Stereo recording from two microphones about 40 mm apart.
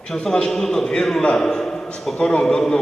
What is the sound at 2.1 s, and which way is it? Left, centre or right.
Speech, centre.